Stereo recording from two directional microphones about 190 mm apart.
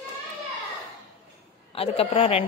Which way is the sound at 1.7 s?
30° left (ahead or behind).